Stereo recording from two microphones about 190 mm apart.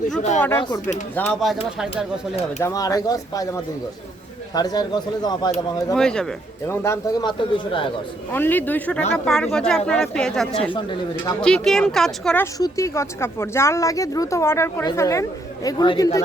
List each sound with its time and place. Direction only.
1.1 s speech: 5° left (ahead or behind)
2.6 s speech: 15° left (ahead or behind)
5.9 s speech: 5° left (ahead or behind)
6.7 s speech: 15° left (ahead or behind)
8.3 s speech: 10° left (ahead or behind)
12.5 s speech: 15° left (ahead or behind)